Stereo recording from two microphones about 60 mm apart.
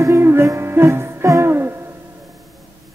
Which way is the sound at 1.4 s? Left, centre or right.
Right.